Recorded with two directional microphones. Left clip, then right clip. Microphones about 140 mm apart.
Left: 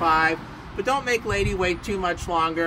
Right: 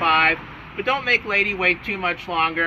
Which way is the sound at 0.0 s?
20° left (ahead or behind).